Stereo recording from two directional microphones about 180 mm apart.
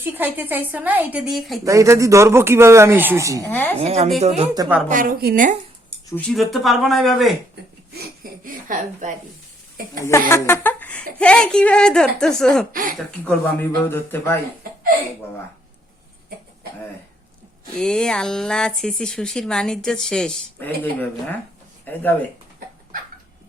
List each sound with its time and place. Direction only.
0.0 s a man's voice: 10° right (ahead or behind)
1.6 s a man's voice: 15° right (ahead or behind)
3.4 s speech: 10° left (ahead or behind)
3.8 s a woman's voice: 35° right (ahead or behind)
4.9 s a woman's voice: 50° right (ahead or behind)
6.1 s speech: 5° left (ahead or behind)
7.9 s speech: 55° right (ahead or behind)
10.0 s speech: 15° left (ahead or behind)
12.7 s a woman's voice: 50° right (ahead or behind)
13.0 s speech: 5° left (ahead or behind)
17.7 s speech: 5° left (ahead or behind)
21.9 s speech: 10° left (ahead or behind)